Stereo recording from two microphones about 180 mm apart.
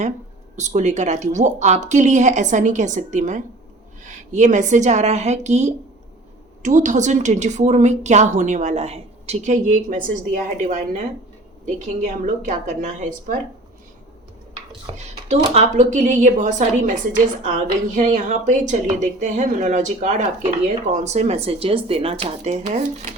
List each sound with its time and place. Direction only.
0.5 s a woman's voice: 40° right (ahead or behind)
14.9 s speech: 40° right (ahead or behind)